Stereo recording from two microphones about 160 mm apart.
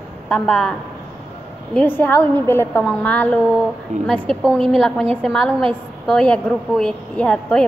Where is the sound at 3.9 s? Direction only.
50° right (ahead or behind).